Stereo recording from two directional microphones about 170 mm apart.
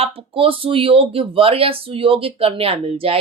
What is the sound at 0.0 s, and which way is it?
Speech, 35° right (ahead or behind).